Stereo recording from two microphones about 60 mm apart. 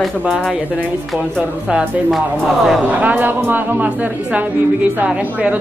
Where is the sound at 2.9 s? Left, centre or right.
Right.